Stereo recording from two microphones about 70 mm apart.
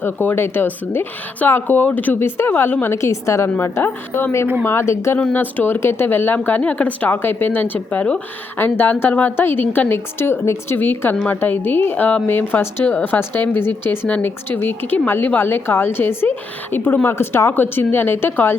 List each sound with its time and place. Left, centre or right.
0.0 s a woman's voice: left
2.5 s speech: left
2.9 s a woman's voice: left
3.6 s a woman's voice: left
5.3 s speech: left
8.5 s a woman's voice: left